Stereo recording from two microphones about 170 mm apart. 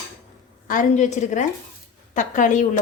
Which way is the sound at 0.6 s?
50° left (ahead or behind).